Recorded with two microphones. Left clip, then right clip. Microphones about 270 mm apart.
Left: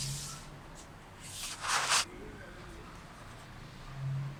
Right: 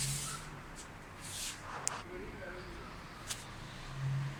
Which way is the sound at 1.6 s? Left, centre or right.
Left.